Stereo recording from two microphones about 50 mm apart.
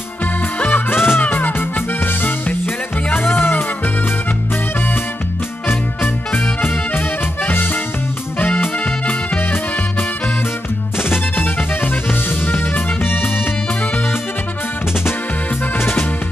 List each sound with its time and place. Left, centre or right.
0.7 s music: left
1.2 s music: left
7.4 s music: left
11.0 s music: left
15.8 s music: left